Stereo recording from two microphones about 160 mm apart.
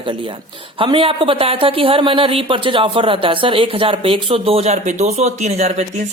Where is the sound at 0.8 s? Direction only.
35° right (ahead or behind).